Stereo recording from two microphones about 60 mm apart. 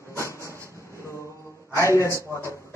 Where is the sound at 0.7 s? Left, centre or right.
Left.